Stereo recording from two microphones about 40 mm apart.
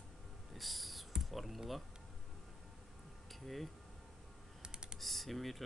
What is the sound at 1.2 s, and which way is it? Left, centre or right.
Speech, centre.